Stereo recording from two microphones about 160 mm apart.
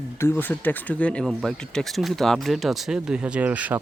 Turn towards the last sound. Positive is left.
turn(degrees=-10)  # may be behind; listen again after turning